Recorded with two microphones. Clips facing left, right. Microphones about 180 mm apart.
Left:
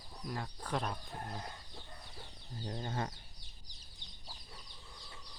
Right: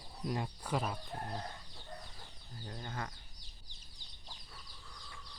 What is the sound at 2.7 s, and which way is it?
Speech, 25° left (ahead or behind).